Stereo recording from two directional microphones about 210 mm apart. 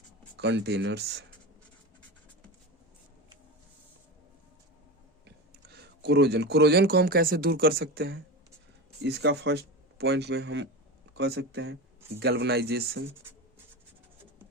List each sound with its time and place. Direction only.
0.3 s speech: 55° right (ahead or behind)
5.2 s speech: 50° right (ahead or behind)